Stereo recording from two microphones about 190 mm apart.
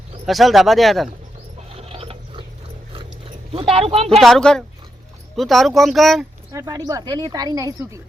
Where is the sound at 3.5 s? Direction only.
30° right (ahead or behind).